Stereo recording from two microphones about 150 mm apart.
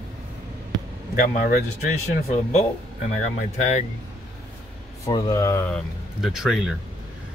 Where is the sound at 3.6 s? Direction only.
50° left (ahead or behind).